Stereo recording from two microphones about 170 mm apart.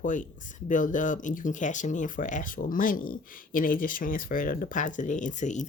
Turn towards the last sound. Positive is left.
turn(degrees=45)  # may be behind; listen again after turning